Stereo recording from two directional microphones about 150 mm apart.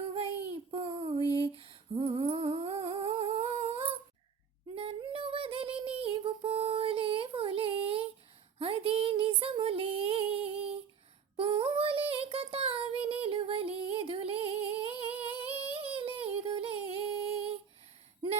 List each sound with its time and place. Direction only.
0.0 s child singing: 40° right (ahead or behind)
1.4 s humming: 40° right (ahead or behind)
4.7 s female singing: 40° right (ahead or behind)
8.5 s a sound: 40° right (ahead or behind)
11.3 s child singing: 40° right (ahead or behind)